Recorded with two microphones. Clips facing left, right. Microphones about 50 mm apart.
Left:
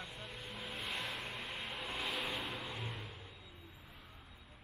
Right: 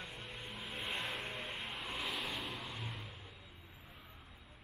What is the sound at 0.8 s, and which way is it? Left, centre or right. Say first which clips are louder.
Vehicle: right 2 dB; centre.